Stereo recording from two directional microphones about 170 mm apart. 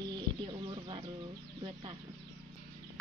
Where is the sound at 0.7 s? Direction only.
30° right (ahead or behind).